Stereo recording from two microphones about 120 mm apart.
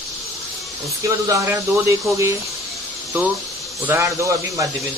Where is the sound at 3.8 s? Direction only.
20° right (ahead or behind).